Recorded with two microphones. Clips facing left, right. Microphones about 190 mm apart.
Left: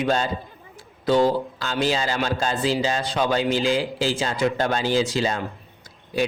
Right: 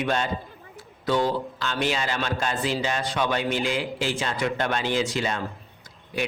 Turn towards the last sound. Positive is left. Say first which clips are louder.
# left 5 dB
turn(degrees=35)  # may be behind; listen again after turning